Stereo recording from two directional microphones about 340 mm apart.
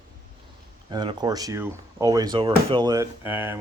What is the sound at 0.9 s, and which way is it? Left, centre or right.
Speech, centre.